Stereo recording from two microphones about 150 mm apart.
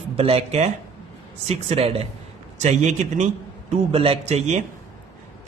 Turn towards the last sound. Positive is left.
turn(degrees=-50)  # may be behind; listen again after turning